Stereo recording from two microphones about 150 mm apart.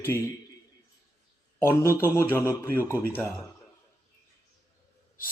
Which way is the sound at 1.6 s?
15° left (ahead or behind).